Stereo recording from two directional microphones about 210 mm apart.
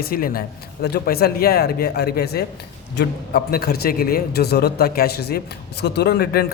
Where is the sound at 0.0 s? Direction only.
45° left (ahead or behind).